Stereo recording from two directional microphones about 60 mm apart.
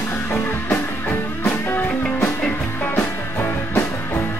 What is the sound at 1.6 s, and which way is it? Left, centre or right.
Music, left.